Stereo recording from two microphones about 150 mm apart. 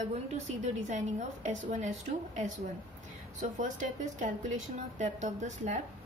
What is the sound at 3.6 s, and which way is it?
A woman's voice, 55° right (ahead or behind).